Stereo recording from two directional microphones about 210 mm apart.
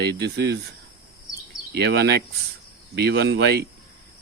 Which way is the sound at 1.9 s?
55° right (ahead or behind).